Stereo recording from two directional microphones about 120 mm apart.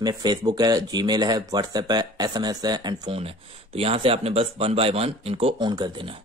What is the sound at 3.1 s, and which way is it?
Speech, 55° right (ahead or behind).